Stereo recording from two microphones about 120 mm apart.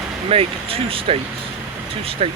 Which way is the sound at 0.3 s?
50° right (ahead or behind).